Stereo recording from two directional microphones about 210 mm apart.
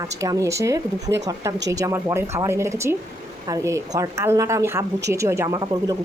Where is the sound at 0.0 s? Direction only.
15° right (ahead or behind).